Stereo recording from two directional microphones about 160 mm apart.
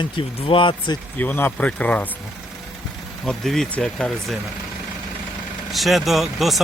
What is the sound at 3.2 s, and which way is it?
Speech, centre (ahead or behind).